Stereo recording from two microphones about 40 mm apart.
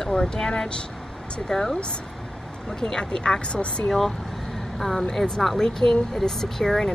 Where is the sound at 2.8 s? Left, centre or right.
Centre.